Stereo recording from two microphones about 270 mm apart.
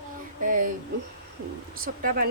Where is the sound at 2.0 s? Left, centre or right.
Right.